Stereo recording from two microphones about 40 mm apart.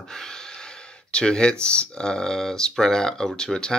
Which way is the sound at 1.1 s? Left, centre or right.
Left.